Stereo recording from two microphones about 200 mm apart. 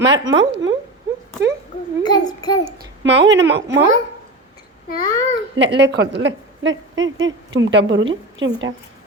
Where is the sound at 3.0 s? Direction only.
65° right (ahead or behind).